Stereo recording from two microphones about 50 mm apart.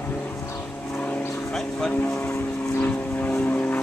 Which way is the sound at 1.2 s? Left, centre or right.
Left.